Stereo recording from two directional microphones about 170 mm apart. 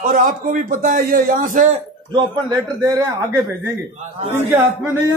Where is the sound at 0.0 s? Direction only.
50° right (ahead or behind).